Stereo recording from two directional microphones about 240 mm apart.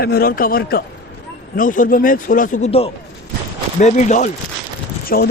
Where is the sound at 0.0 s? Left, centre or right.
Left.